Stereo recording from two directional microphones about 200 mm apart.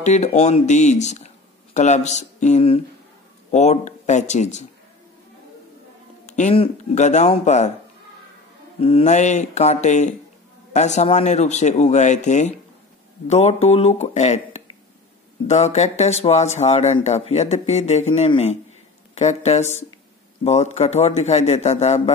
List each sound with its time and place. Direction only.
0.0 s speech: 35° left (ahead or behind)
6.2 s speech: 35° left (ahead or behind)
8.8 s speech: 30° left (ahead or behind)